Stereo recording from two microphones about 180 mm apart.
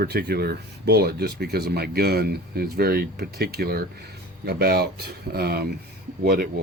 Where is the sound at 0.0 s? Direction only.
60° right (ahead or behind).